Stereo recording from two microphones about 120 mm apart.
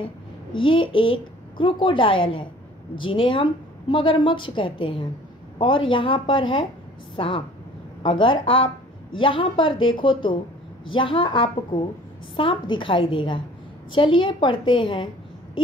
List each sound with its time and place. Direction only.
0.0 s a woman's voice: 45° left (ahead or behind)